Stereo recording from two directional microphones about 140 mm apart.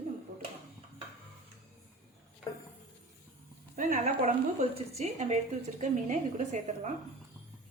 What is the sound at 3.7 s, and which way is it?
A woman's voice, 65° right (ahead or behind).